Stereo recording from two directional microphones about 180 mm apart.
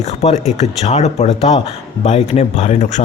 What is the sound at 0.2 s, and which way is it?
A man's voice, 35° left (ahead or behind).